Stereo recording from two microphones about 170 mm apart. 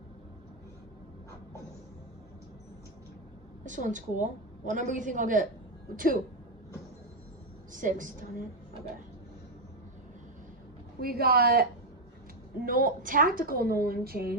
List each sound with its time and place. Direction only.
3.6 s a woman's voice: 50° right (ahead or behind)
7.7 s a woman's voice: 50° right (ahead or behind)
11.0 s a woman's voice: 60° right (ahead or behind)